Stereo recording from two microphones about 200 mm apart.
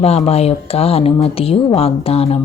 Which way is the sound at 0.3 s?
30° left (ahead or behind).